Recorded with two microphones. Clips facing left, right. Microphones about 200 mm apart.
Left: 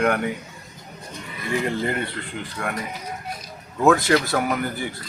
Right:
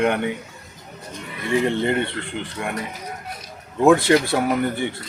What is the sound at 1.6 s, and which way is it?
Speech, 25° right (ahead or behind).